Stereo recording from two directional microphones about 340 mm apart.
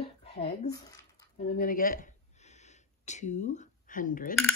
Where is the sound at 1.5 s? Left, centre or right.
Left.